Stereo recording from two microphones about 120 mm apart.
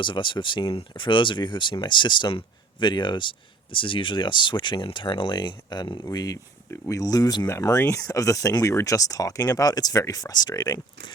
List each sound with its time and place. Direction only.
0.0 s speech: 45° left (ahead or behind)